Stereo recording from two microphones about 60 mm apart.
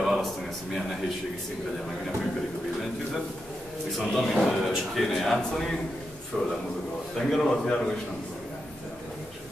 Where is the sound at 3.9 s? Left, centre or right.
Centre.